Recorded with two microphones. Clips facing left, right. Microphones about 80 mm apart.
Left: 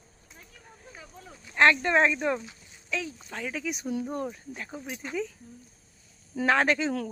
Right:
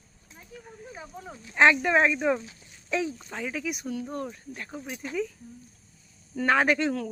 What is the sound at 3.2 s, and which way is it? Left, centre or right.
Speech, centre.